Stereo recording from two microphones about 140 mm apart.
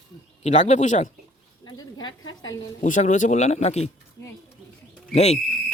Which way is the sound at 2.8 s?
60° left (ahead or behind).